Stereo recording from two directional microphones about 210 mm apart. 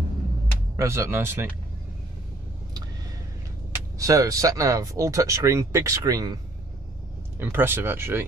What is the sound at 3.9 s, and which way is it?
Speech, 15° right (ahead or behind).